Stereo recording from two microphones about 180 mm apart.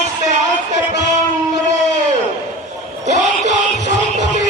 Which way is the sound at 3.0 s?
40° right (ahead or behind).